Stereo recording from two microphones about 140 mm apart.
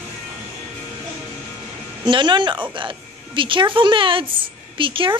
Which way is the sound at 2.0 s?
35° right (ahead or behind).